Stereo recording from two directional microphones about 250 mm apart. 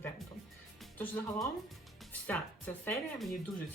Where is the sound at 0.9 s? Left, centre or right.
Centre.